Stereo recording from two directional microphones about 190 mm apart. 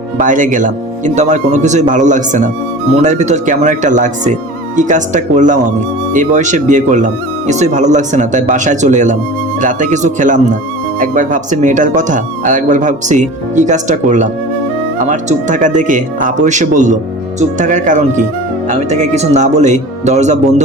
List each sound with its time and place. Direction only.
0.2 s speech: 40° right (ahead or behind)